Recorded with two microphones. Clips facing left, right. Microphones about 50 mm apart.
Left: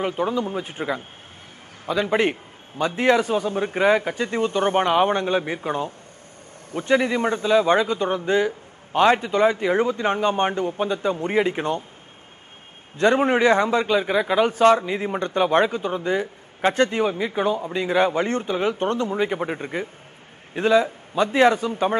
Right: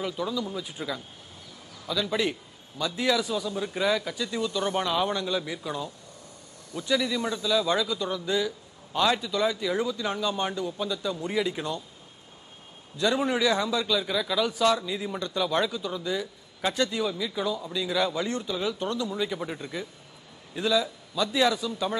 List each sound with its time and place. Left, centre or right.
0.0 s a man's voice: left
12.9 s a man's voice: left